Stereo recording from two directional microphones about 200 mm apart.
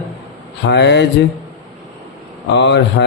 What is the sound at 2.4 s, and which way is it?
Speech, 60° left (ahead or behind).